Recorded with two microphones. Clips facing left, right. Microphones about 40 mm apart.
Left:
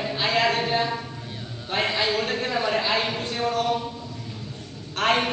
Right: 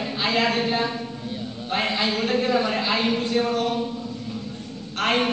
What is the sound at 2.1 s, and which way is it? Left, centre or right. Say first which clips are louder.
Speech: right 1 dB; right.